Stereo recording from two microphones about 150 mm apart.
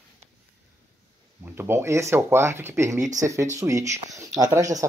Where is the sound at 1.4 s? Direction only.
15° right (ahead or behind).